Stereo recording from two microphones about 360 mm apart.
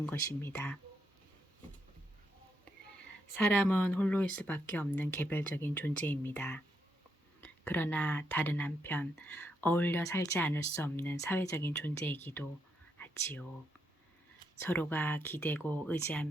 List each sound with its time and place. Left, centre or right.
0.0 s speech: centre
3.3 s speech: centre
13.0 s whispering: centre
14.6 s speech: centre